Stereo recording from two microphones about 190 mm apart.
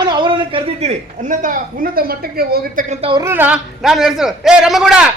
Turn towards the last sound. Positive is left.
turn(degrees=-5)  # may be behind; listen again after turning